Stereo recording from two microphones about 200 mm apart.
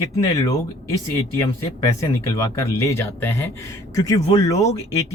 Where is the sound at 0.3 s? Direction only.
15° left (ahead or behind).